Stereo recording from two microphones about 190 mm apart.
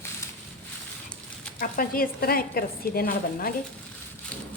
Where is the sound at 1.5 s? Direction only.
50° left (ahead or behind).